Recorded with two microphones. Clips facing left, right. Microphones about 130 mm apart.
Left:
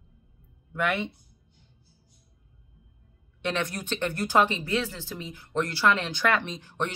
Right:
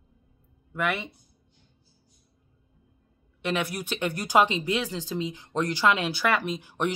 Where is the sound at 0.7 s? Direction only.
Centre (ahead or behind).